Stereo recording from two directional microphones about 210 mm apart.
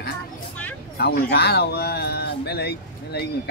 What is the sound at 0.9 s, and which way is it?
Speech, 50° left (ahead or behind).